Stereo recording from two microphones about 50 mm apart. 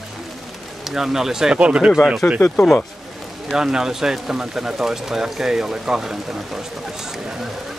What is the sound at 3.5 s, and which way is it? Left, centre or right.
Speech, centre.